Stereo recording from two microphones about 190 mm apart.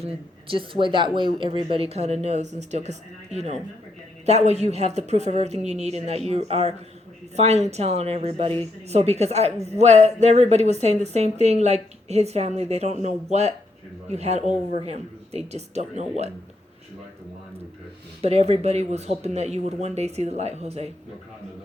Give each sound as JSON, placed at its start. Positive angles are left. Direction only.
{"t": 0.0, "sound": "a woman's voice", "side_deg": -30}
{"t": 18.2, "sound": "a woman's voice", "side_deg": -30}